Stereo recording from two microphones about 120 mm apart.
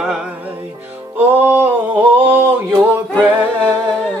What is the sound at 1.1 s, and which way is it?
Music, 15° right (ahead or behind).